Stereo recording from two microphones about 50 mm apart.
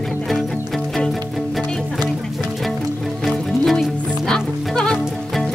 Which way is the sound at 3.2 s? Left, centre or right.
Centre.